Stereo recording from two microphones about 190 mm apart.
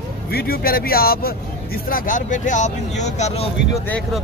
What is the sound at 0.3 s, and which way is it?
Speech, 55° left (ahead or behind).